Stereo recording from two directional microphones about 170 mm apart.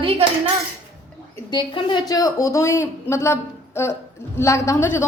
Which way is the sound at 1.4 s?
25° left (ahead or behind).